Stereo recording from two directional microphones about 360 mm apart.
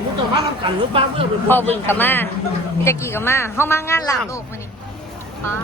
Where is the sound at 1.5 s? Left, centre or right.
Centre.